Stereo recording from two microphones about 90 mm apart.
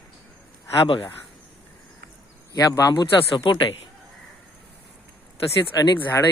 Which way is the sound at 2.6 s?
40° left (ahead or behind).